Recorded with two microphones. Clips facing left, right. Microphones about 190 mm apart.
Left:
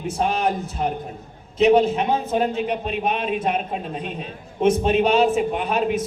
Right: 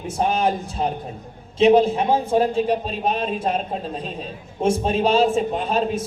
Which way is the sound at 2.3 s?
35° right (ahead or behind).